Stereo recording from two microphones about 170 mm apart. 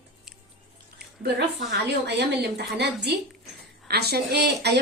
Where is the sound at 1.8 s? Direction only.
85° right.